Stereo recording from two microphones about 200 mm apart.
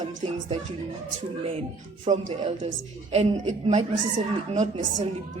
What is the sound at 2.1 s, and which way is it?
A woman's voice, 30° right (ahead or behind).